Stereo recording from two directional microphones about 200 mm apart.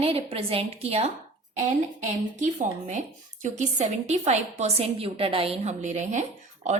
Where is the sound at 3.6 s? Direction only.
35° right (ahead or behind).